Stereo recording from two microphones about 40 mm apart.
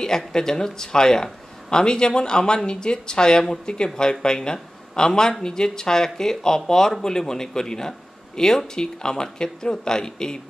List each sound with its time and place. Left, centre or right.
0.3 s speech: centre